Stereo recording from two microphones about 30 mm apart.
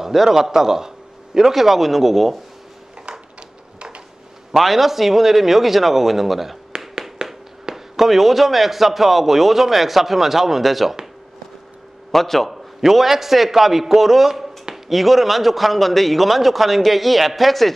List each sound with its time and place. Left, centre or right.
0.0 s a man's voice: centre
3.1 s a sound: right
4.5 s a man's voice: centre
7.2 s a sound: right
7.7 s a man's voice: centre
12.1 s a man's voice: centre
12.4 s a man's voice: centre